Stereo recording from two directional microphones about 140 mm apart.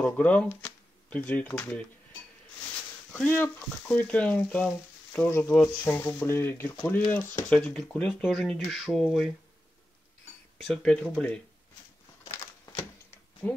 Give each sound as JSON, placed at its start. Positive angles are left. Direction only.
{"t": 0.0, "sound": "speech", "side_deg": 10}
{"t": 3.1, "sound": "speech", "side_deg": 10}
{"t": 10.6, "sound": "speech", "side_deg": 5}
{"t": 13.4, "sound": "speech", "side_deg": 10}